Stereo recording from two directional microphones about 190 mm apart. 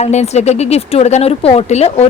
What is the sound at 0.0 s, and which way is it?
Speech, 35° left (ahead or behind).